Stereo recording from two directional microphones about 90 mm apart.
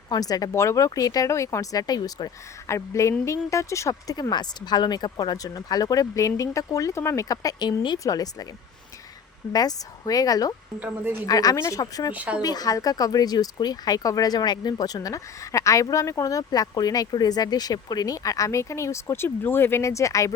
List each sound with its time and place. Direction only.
0.1 s speech: 45° left (ahead or behind)
7.9 s speech: 40° left (ahead or behind)
9.5 s speech: 45° left (ahead or behind)
10.8 s a woman's voice: 20° right (ahead or behind)
11.3 s speech: 45° left (ahead or behind)
11.5 s speech: 30° left (ahead or behind)
11.8 s speech: 45° left (ahead or behind)
12.1 s speech: 15° right (ahead or behind)
12.4 s speech: 45° left (ahead or behind)